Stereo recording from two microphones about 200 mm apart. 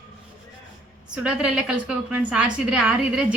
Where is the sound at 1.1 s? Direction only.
5° right (ahead or behind).